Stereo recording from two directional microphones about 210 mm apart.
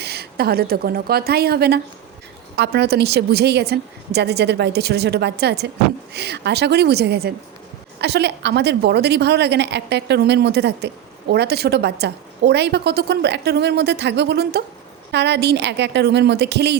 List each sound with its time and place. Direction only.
0.0 s a woman's voice: 50° right (ahead or behind)